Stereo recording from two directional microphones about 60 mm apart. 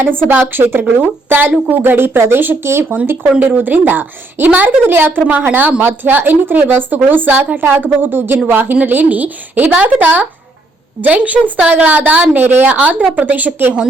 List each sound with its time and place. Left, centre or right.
0.3 s a woman's voice: right